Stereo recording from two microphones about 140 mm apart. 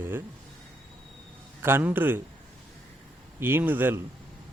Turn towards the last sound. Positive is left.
turn(degrees=-15)  # may be behind; listen again after turning